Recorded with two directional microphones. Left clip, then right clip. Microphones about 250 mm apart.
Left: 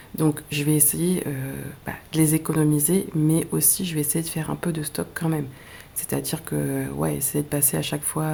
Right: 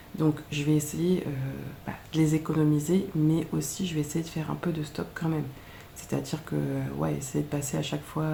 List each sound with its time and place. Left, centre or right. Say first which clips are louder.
0.2 s speech: left 4 dB; left